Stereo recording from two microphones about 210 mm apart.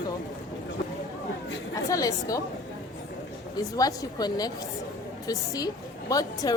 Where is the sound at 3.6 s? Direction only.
15° left (ahead or behind).